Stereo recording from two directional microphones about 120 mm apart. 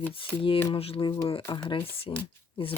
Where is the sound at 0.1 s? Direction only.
45° left (ahead or behind).